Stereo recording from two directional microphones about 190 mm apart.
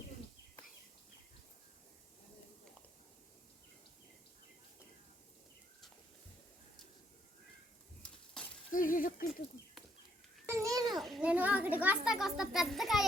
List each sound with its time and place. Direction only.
8.0 s a sound: 5° left (ahead or behind)
8.7 s speech: 45° left (ahead or behind)
10.5 s babbling: 15° right (ahead or behind)
10.9 s a child's voice: centre (ahead or behind)